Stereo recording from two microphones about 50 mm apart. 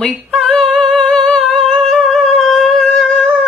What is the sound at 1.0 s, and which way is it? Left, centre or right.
Humming, centre.